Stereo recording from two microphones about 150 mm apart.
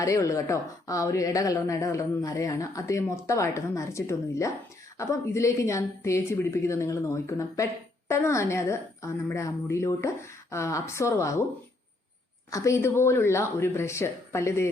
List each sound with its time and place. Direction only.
0.0 s a woman's voice: 20° left (ahead or behind)
12.5 s speech: 20° left (ahead or behind)